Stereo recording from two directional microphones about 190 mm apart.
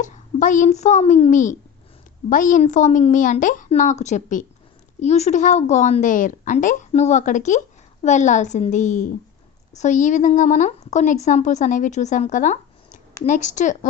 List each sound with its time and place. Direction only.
0.0 s a child's voice: 40° left (ahead or behind)